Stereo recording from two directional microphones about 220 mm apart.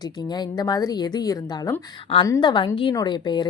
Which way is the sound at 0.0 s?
20° left (ahead or behind).